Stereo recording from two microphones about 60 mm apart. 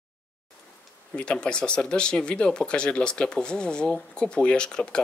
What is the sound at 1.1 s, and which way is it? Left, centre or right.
Speech, centre.